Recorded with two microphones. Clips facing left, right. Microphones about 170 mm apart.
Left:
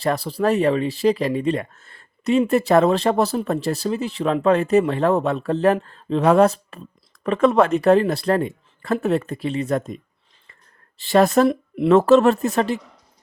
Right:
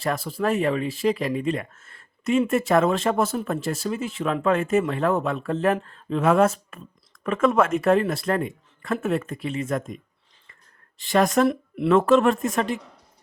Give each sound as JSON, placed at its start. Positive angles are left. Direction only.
{"t": 0.0, "sound": "speech", "side_deg": 35}
{"t": 11.0, "sound": "speech", "side_deg": 35}
{"t": 11.4, "sound": "speech", "side_deg": 20}
{"t": 11.9, "sound": "speech", "side_deg": 35}